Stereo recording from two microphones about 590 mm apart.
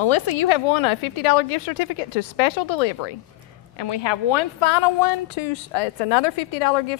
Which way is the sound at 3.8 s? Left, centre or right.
Left.